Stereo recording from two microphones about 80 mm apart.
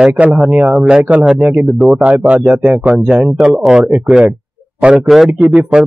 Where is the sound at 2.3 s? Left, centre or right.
Centre.